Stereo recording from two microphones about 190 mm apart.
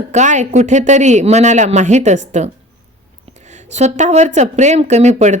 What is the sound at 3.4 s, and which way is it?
A woman's voice, 40° right (ahead or behind).